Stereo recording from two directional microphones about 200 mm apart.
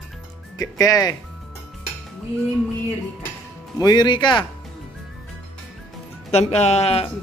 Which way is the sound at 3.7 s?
20° left (ahead or behind).